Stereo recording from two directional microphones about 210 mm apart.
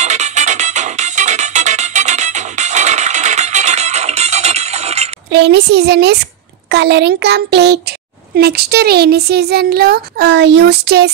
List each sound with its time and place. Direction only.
0.0 s music: 35° right (ahead or behind)
5.3 s speech: 55° right (ahead or behind)